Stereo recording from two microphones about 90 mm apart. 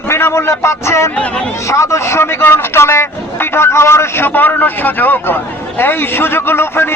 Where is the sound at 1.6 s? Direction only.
35° left (ahead or behind).